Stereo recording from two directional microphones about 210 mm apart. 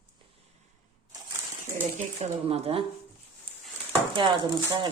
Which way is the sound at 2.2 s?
30° right (ahead or behind).